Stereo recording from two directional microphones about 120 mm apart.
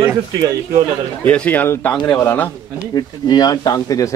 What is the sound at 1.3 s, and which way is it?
Speech, 10° left (ahead or behind).